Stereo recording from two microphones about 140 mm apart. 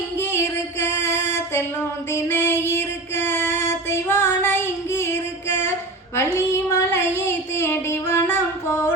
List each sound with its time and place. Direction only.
0.2 s music: 15° left (ahead or behind)
6.1 s child singing: 20° left (ahead or behind)